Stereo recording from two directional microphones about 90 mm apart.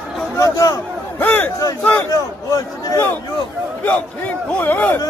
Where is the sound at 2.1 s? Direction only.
40° left (ahead or behind).